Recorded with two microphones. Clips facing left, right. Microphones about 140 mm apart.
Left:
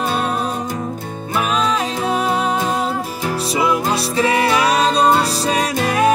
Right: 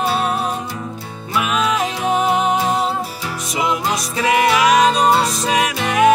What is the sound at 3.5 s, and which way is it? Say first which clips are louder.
Music: left 1 dB; 30° left (ahead or behind).